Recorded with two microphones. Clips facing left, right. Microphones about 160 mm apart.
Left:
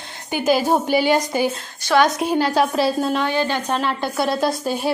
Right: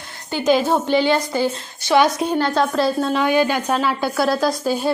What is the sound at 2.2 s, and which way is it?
A woman's voice, 10° left (ahead or behind).